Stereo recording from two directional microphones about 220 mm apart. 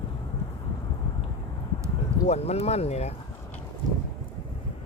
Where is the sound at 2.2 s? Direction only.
30° left (ahead or behind).